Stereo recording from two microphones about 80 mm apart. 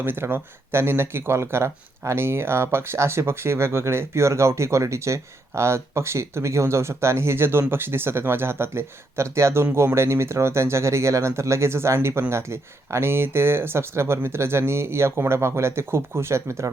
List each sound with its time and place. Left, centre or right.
0.0 s speech: right